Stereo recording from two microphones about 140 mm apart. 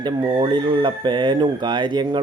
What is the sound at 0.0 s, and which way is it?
Speech, 30° right (ahead or behind).